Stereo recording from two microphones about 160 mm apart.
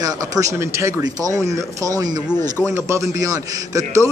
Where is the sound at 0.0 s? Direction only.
20° right (ahead or behind).